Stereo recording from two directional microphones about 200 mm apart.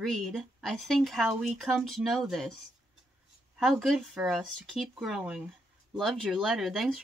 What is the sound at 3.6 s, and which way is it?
Speech, centre (ahead or behind).